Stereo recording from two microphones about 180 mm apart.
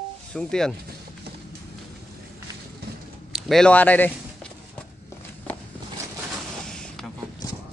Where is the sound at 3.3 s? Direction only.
Centre (ahead or behind).